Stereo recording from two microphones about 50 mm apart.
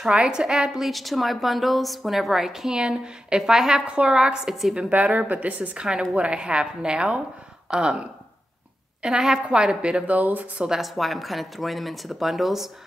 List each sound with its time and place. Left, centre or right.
0.0 s a woman's voice: centre
5.3 s a woman's voice: right
9.0 s a woman's voice: centre
10.1 s speech: right
10.8 s speech: centre